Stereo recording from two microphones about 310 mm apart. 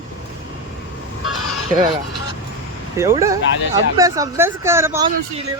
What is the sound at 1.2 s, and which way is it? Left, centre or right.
Fowl, left.